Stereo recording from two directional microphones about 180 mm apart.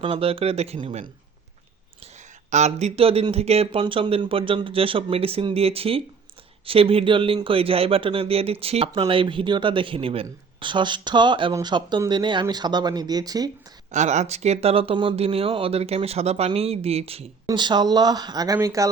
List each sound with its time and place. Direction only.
0.0 s speech: 30° right (ahead or behind)
2.5 s speech: 40° right (ahead or behind); by 13.5 s 20° right (ahead or behind)
13.9 s speech: 40° right (ahead or behind); by 18.9 s 15° right (ahead or behind)